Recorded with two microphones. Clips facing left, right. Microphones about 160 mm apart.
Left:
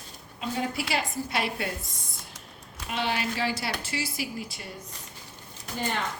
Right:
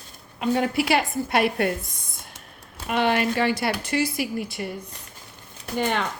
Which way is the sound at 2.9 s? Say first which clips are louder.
Right 8 dB; 55° right (ahead or behind).